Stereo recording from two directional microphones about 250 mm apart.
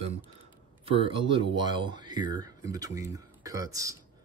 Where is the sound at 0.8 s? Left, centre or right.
Right.